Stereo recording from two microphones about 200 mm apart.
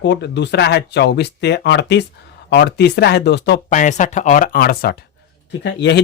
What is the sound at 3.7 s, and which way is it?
Speech, 40° left (ahead or behind).